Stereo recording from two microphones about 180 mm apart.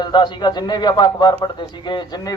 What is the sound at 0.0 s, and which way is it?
A man's voice, 25° left (ahead or behind).